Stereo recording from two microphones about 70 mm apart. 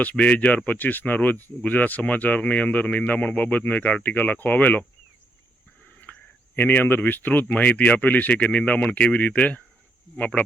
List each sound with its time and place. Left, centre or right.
0.0 s speech: left
5.8 s a sound: left
6.6 s speech: left